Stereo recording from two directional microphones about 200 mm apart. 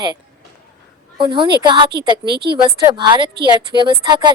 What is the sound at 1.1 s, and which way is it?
Speech, 25° right (ahead or behind).